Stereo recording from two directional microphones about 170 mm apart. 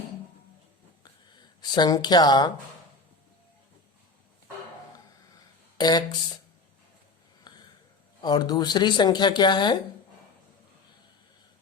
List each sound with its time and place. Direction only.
1.7 s speech: 25° left (ahead or behind)
5.7 s speech: 25° left (ahead or behind)
7.5 s a sound: 25° left (ahead or behind)
8.2 s speech: 25° left (ahead or behind)